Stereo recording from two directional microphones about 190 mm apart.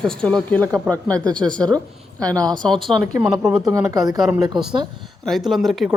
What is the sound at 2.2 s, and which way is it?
Speech, 5° left (ahead or behind).